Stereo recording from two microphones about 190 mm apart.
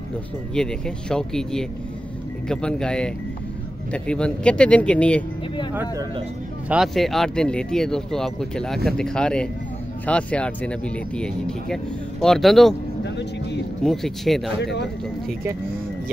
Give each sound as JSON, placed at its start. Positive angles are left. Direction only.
{"t": 0.6, "sound": "speech", "side_deg": 5}
{"t": 6.7, "sound": "speech", "side_deg": 0}
{"t": 13.0, "sound": "speech", "side_deg": 65}
{"t": 13.8, "sound": "speech", "side_deg": 0}
{"t": 14.6, "sound": "speech", "side_deg": 65}